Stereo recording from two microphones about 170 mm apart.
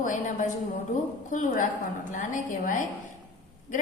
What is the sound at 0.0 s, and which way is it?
A woman's voice, 50° left (ahead or behind).